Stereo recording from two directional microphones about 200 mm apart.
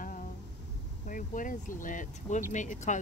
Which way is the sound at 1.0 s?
40° left (ahead or behind).